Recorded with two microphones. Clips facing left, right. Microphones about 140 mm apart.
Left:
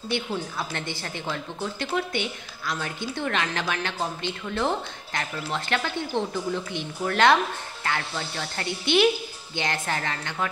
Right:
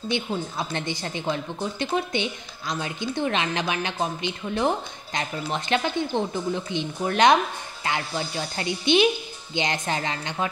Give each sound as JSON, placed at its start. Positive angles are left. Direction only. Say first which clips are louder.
{"t": 0.1, "sound": "a woman's voice", "louder": "even", "side_deg": -20}